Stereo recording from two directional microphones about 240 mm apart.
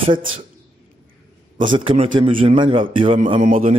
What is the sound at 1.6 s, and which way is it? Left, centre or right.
Speech, right.